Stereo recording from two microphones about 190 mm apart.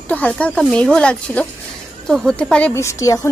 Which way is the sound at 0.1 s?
5° left (ahead or behind).